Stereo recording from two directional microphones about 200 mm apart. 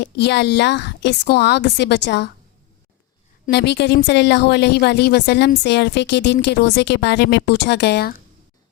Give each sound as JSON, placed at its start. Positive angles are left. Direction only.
{"t": 0.0, "sound": "speech", "side_deg": 60}
{"t": 3.5, "sound": "speech", "side_deg": 60}